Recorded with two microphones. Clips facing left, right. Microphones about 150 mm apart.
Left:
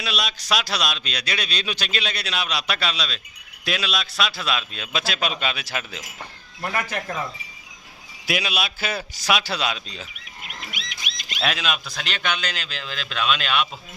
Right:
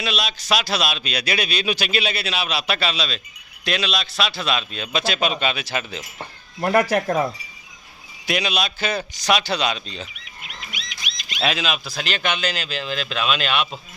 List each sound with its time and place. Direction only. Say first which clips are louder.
0.0 s speech: right 2 dB; centre (ahead or behind)
6.6 s speech: right 9 dB; 40° right (ahead or behind)
8.3 s speech: right 3 dB; 5° left (ahead or behind)
11.3 s speech: right 2 dB; centre (ahead or behind)